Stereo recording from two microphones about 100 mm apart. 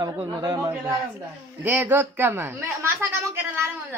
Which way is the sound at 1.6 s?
20° right (ahead or behind).